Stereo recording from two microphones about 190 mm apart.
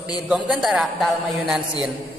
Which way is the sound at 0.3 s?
Centre (ahead or behind).